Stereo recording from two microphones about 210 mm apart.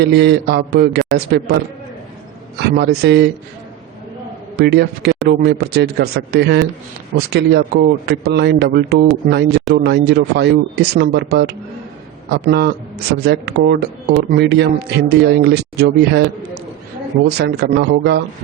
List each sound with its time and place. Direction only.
0.0 s speech: 55° right (ahead or behind)
2.6 s speech: 50° right (ahead or behind)
4.5 s speech: 50° right (ahead or behind)
17.2 s speech: 50° right (ahead or behind)